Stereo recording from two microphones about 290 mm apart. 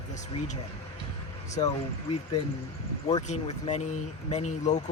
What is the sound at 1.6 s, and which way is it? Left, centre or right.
Speech, left.